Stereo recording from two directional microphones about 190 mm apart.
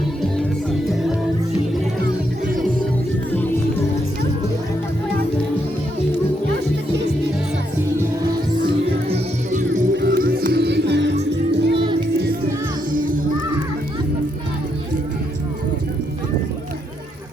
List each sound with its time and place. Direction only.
9.0 s music: 35° right (ahead or behind)
9.9 s music: 60° right (ahead or behind)
11.8 s music: 25° right (ahead or behind)